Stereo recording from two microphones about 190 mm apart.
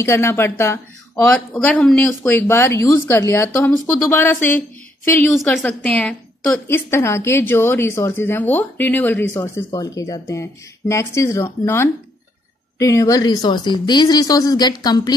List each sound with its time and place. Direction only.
0.0 s a woman's voice: 15° left (ahead or behind)